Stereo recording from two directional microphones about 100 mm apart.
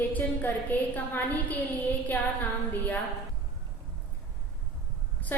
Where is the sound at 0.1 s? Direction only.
15° left (ahead or behind).